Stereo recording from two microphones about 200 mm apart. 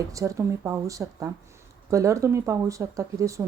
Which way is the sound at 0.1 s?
15° right (ahead or behind).